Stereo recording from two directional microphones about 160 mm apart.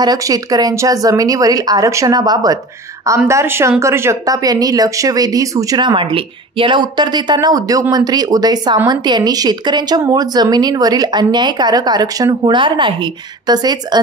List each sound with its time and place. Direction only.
0.0 s speech: 25° right (ahead or behind)